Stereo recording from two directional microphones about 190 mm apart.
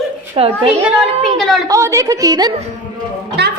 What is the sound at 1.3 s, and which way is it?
Speech, centre (ahead or behind).